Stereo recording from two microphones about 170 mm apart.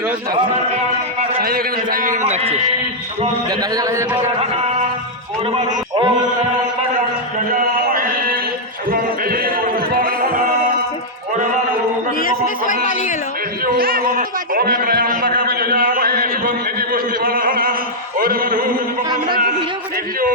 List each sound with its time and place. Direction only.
1.4 s a man's voice: 60° right (ahead or behind); by 2.6 s 40° right (ahead or behind)
3.5 s a man's voice: 20° right (ahead or behind)
5.5 s a man's voice: 35° right (ahead or behind)
8.9 s music: 60° right (ahead or behind)
12.2 s a sound: 50° left (ahead or behind)
13.7 s a man's voice: 60° right (ahead or behind)